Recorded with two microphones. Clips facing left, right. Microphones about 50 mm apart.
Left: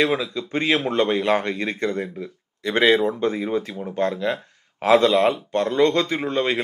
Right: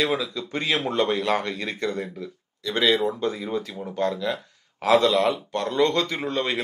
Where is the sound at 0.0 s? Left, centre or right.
Left.